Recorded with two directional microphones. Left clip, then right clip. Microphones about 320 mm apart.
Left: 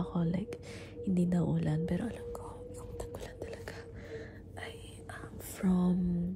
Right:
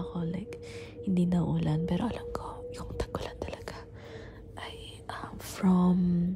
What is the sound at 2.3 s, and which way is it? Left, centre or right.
Whispering, right.